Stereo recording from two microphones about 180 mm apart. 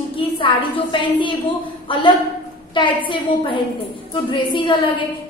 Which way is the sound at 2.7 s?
25° left (ahead or behind).